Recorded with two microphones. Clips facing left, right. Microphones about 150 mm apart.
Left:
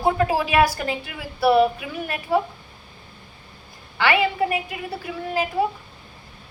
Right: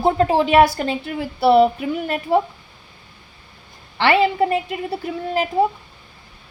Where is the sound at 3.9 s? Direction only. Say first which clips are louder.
Right 4 dB; 30° right (ahead or behind).